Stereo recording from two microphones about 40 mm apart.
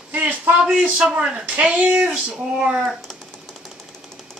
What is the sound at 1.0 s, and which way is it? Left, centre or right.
Speech, centre.